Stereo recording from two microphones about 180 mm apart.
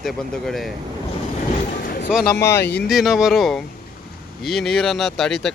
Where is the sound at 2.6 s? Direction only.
70° left (ahead or behind).